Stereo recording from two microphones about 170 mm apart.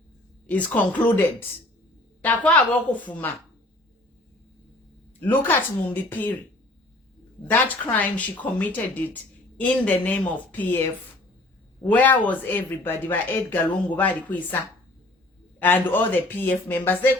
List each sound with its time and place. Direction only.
0.4 s speech: 10° left (ahead or behind)
5.2 s speech: 10° left (ahead or behind)
7.5 s speech: 10° left (ahead or behind)